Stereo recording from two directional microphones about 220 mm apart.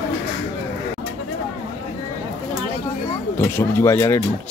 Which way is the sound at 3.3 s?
10° left (ahead or behind).